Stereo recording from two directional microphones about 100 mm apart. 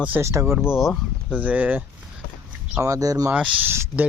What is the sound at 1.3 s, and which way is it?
Speech, 15° right (ahead or behind).